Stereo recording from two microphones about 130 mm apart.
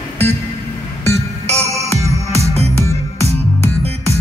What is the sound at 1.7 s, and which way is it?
Music, 25° left (ahead or behind).